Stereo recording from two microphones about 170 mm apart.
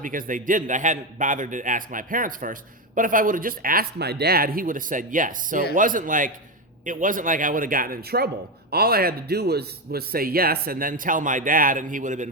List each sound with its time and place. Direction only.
0.0 s a man's voice: 55° right (ahead or behind)